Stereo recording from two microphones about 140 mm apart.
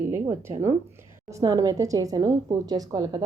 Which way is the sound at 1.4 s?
25° right (ahead or behind).